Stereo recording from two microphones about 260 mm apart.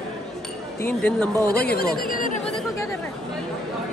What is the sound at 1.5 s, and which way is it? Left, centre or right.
Speech, left.